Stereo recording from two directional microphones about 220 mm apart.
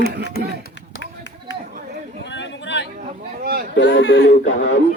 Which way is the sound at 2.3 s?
55° left (ahead or behind).